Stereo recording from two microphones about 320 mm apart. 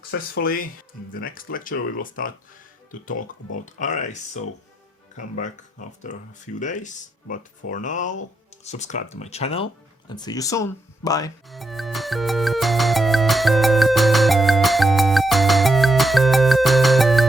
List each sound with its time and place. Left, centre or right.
0.1 s speech: left
3.7 s speech: left
6.1 s speech: left
11.4 s music: centre